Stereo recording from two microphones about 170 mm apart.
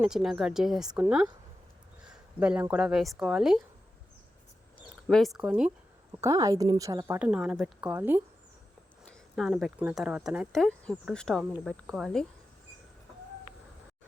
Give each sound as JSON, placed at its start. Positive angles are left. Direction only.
{"t": 0.0, "sound": "speech", "side_deg": -5}
{"t": 2.0, "sound": "speech", "side_deg": -5}
{"t": 5.0, "sound": "speech", "side_deg": 0}
{"t": 6.1, "sound": "a woman's voice", "side_deg": -20}
{"t": 7.2, "sound": "speech", "side_deg": -5}
{"t": 9.0, "sound": "speech", "side_deg": 0}